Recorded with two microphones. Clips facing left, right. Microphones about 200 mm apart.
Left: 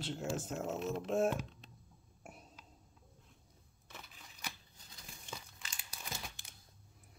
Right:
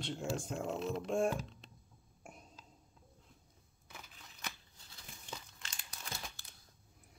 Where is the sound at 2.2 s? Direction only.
5° left (ahead or behind).